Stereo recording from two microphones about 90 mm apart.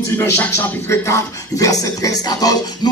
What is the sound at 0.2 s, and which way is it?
Speech, 25° left (ahead or behind).